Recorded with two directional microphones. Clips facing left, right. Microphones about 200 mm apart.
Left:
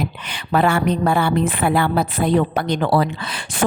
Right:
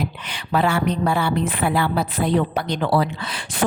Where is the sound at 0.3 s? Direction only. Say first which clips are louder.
Left 3 dB; 50° left (ahead or behind).